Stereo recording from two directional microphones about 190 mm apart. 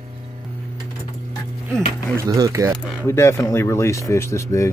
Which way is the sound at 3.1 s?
15° left (ahead or behind).